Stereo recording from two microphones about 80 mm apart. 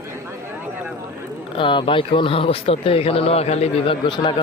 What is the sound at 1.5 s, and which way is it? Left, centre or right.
Speech, left.